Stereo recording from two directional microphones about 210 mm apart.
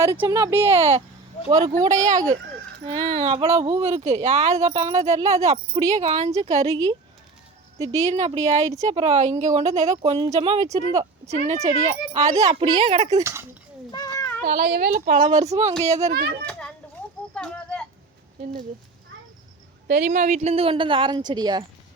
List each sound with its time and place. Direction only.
0.2 s speech: 15° right (ahead or behind)
2.9 s a woman's voice: 30° right (ahead or behind)
4.5 s speech: 20° right (ahead or behind)
5.5 s a woman's voice: 30° right (ahead or behind)
7.8 s speech: 15° right (ahead or behind)
8.1 s a woman's voice: 30° right (ahead or behind)
12.2 s speech: 15° right (ahead or behind); by 13.2 s 30° right (ahead or behind)
13.2 s speech: 10° right (ahead or behind)
14.2 s child singing: 10° left (ahead or behind)
14.4 s a woman's voice: 45° right (ahead or behind)
16.5 s children playing: 5° left (ahead or behind)
17.3 s a sound: 5° left (ahead or behind)
19.9 s speech: 45° right (ahead or behind); by 21.6 s 20° right (ahead or behind)